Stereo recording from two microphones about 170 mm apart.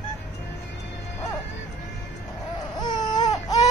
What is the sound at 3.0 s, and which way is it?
Baby cry, 25° left (ahead or behind).